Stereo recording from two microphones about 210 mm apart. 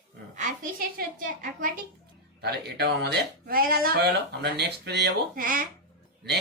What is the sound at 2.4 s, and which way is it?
Speech, 50° right (ahead or behind).